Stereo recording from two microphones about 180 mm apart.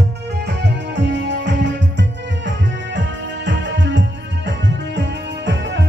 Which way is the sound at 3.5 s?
80° right.